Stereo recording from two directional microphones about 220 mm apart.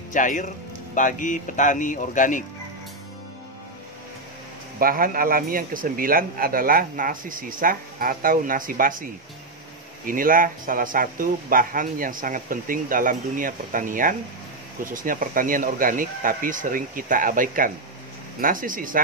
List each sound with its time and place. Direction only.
0.1 s speech: 35° left (ahead or behind)
4.7 s speech: 40° right (ahead or behind)
10.0 s speech: 40° right (ahead or behind)